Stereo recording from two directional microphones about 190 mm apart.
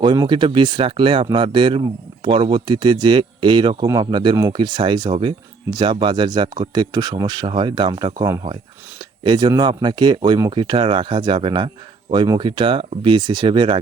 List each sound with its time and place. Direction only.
0.0 s speech: 25° right (ahead or behind)